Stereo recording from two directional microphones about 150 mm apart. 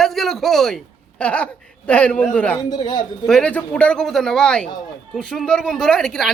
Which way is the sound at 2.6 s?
30° left (ahead or behind).